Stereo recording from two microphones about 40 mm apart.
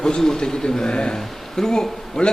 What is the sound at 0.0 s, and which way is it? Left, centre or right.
A man's voice, centre.